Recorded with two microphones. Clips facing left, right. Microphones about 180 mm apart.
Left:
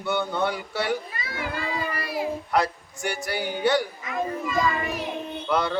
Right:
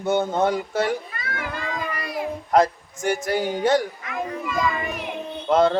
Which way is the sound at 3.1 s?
45° right (ahead or behind).